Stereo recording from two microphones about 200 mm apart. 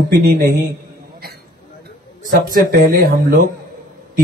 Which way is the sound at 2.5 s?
45° right (ahead or behind).